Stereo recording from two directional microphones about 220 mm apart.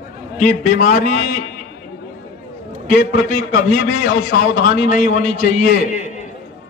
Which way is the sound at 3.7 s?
45° left (ahead or behind).